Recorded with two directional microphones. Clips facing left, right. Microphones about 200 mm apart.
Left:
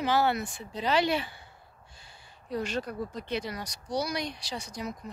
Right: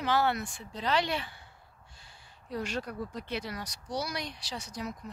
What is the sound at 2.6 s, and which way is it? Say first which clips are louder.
Speech: left 2 dB; 10° right (ahead or behind).